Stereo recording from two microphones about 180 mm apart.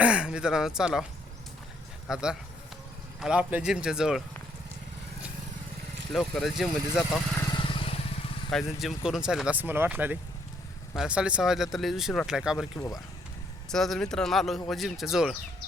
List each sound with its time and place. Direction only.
0.0 s speech: 5° right (ahead or behind)
2.0 s speech: 5° right (ahead or behind)
6.1 s speech: centre (ahead or behind)
7.5 s vehicle: 30° left (ahead or behind)
8.4 s speech: centre (ahead or behind)
13.7 s speech: centre (ahead or behind)